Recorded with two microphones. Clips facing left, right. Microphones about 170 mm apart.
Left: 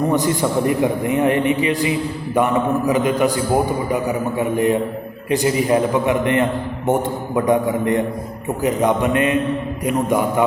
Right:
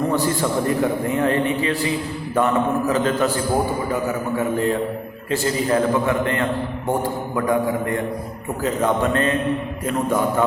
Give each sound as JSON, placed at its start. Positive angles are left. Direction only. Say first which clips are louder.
{"t": 0.1, "sound": "a man's voice", "louder": "left 2 dB", "side_deg": 15}